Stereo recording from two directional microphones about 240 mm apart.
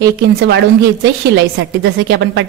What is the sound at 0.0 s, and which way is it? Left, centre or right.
A woman's voice, right.